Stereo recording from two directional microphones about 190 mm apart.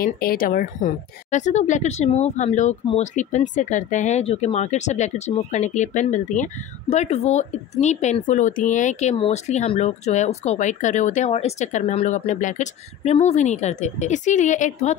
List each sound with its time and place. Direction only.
0.0 s speech: 50° left (ahead or behind)